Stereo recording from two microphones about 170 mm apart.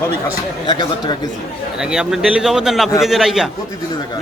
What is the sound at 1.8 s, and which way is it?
A man's voice, 5° right (ahead or behind).